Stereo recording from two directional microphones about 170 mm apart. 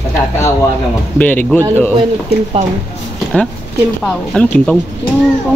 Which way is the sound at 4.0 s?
5° left (ahead or behind).